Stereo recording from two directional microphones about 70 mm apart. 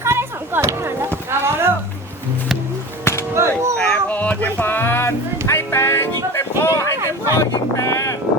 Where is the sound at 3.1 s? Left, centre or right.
Left.